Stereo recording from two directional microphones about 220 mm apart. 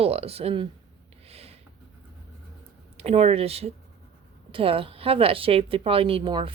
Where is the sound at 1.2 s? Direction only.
25° right (ahead or behind).